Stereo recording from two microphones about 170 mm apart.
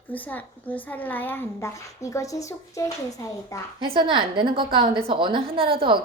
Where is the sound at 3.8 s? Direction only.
30° right (ahead or behind).